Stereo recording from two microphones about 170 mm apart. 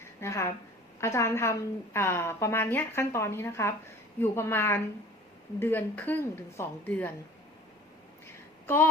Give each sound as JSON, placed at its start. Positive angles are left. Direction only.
{"t": 0.0, "sound": "a sound", "side_deg": 15}
{"t": 1.0, "sound": "a woman's voice", "side_deg": 15}
{"t": 8.6, "sound": "a woman's voice", "side_deg": 15}